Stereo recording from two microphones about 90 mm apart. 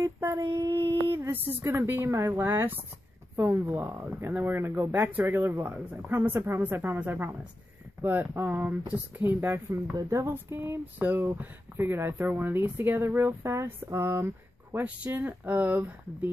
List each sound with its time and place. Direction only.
0.4 s child singing: 60° right (ahead or behind)
0.7 s a sound: 40° right (ahead or behind)
1.0 s a sound: 20° right (ahead or behind)
1.6 s speech: 30° right (ahead or behind)
9.9 s a woman's voice: 40° right (ahead or behind)
10.2 s speech: 25° right (ahead or behind)